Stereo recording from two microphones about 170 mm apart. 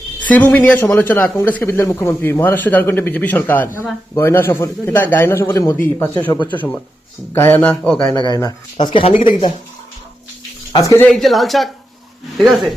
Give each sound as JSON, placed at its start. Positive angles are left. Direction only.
{"t": 0.2, "sound": "speech", "side_deg": 10}
{"t": 8.1, "sound": "speech", "side_deg": 25}
{"t": 10.7, "sound": "speech", "side_deg": 20}
{"t": 11.0, "sound": "a woman's voice", "side_deg": 0}